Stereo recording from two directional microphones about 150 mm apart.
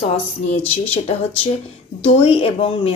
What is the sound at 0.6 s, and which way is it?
Speech, 40° left (ahead or behind).